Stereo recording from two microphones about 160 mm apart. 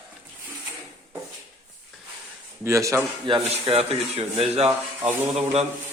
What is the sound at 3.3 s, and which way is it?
Speech, 35° right (ahead or behind).